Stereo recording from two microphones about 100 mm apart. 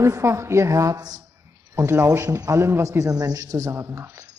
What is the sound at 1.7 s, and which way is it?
Speech, 25° right (ahead or behind).